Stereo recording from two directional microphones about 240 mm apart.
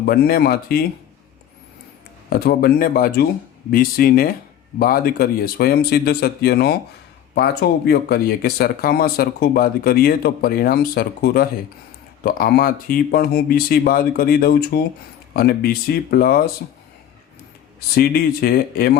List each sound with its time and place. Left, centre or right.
0.0 s speech: left
2.3 s speech: left
17.7 s speech: left